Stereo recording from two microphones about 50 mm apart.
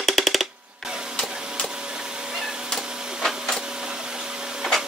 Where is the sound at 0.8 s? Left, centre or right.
Centre.